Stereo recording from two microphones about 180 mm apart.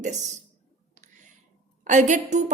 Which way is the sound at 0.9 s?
40° right (ahead or behind).